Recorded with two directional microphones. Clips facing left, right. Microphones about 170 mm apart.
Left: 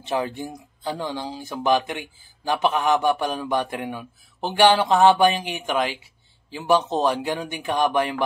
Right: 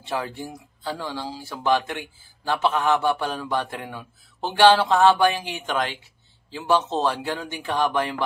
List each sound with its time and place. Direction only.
0.0 s speech: 20° left (ahead or behind)